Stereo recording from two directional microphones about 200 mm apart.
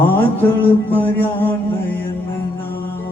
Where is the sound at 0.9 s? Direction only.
10° left (ahead or behind).